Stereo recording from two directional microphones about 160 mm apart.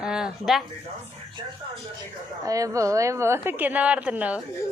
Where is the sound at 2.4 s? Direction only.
20° right (ahead or behind).